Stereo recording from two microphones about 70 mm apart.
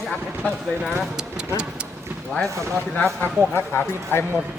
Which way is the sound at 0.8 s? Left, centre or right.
Centre.